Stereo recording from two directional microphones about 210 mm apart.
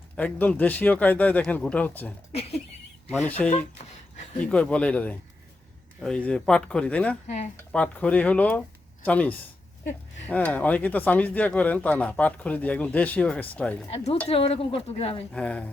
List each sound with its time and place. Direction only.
0.2 s speech: 10° left (ahead or behind)
2.3 s speech: 30° left (ahead or behind)
3.1 s speech: 5° left (ahead or behind)
13.9 s speech: 30° left (ahead or behind)
15.3 s speech: 5° left (ahead or behind)